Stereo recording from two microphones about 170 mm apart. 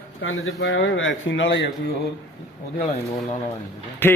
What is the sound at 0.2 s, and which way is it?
A man's voice, 90° left.